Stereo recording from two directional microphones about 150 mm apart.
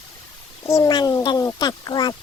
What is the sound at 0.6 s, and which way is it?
A child's voice, 25° left (ahead or behind).